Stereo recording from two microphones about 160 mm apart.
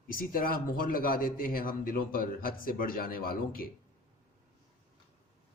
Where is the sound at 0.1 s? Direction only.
60° left (ahead or behind).